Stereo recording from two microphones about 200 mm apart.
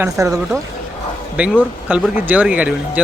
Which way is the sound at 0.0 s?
15° right (ahead or behind).